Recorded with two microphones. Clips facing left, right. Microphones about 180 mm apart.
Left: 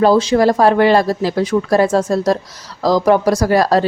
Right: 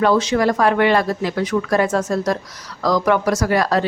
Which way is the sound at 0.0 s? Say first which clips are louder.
Left 4 dB; 30° left (ahead or behind).